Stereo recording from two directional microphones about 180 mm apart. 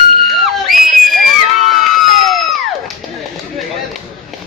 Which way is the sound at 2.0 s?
Centre (ahead or behind).